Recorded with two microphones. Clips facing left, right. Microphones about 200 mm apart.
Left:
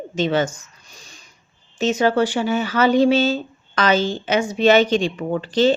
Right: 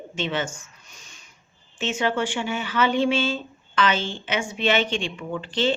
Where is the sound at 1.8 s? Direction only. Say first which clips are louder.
Left 7 dB; 40° left (ahead or behind).